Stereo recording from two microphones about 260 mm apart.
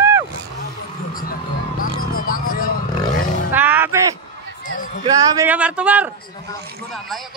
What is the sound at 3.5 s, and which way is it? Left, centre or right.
Music, centre.